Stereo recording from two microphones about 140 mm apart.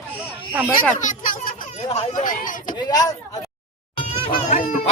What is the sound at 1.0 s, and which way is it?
Speech, 70° left (ahead or behind).